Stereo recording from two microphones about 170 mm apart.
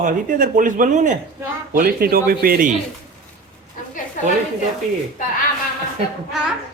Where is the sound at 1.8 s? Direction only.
60° right (ahead or behind).